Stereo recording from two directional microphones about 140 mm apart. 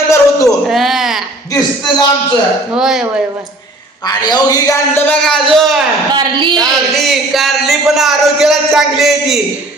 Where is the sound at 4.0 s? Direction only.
30° left (ahead or behind).